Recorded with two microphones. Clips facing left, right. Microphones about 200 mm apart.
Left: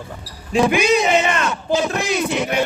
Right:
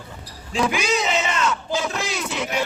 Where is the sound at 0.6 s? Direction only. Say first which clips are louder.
Left 6 dB; 55° left (ahead or behind).